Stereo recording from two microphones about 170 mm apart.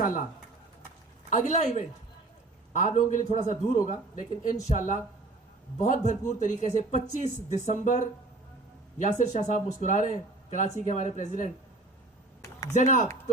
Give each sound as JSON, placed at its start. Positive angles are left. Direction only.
{"t": 0.0, "sound": "speech", "side_deg": 50}
{"t": 1.3, "sound": "speech", "side_deg": 45}
{"t": 2.7, "sound": "speech", "side_deg": 50}
{"t": 12.7, "sound": "speech", "side_deg": 45}